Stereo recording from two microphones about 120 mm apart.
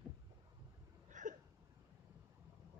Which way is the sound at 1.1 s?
90° right.